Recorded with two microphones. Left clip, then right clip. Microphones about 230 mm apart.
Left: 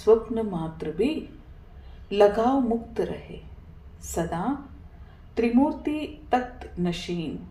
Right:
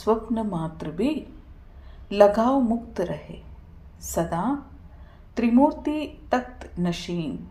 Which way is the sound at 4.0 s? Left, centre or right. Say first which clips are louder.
Right 3 dB; right.